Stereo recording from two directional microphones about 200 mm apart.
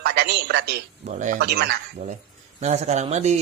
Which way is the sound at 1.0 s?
35° right (ahead or behind).